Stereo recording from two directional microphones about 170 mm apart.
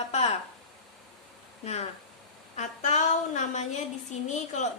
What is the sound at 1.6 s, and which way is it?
A woman's voice, 40° left (ahead or behind).